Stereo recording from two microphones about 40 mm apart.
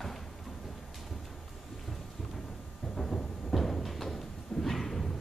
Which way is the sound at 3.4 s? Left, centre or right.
Centre.